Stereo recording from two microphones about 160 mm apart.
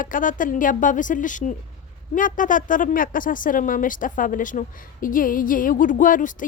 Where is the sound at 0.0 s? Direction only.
55° left (ahead or behind).